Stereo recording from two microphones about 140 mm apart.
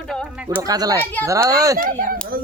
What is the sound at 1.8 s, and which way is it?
Speech, 85° right.